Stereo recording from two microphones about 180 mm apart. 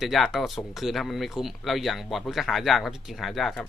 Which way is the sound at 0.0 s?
Centre (ahead or behind).